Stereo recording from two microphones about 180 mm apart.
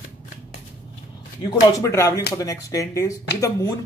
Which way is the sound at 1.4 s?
20° left (ahead or behind).